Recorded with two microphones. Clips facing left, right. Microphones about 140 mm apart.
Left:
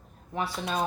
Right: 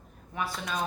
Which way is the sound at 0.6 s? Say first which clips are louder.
Left 4 dB; 30° left (ahead or behind).